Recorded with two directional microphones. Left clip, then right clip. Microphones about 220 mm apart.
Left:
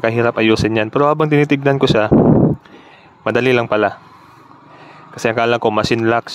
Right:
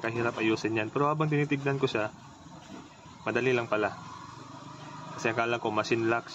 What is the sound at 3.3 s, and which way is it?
Speech, 55° left (ahead or behind).